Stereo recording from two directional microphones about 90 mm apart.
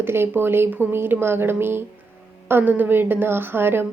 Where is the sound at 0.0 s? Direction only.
25° right (ahead or behind).